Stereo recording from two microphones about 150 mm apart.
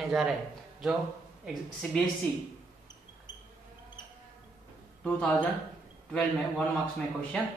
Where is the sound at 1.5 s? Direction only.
Centre (ahead or behind).